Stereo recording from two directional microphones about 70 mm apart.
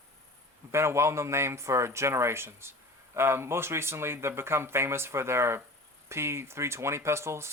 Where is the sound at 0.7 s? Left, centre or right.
Right.